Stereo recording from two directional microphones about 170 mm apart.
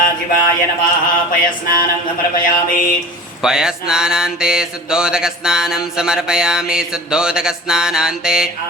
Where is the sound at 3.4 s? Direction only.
5° right (ahead or behind).